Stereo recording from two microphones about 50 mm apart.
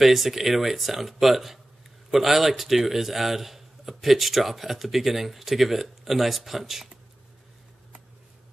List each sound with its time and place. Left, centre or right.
0.0 s speech: centre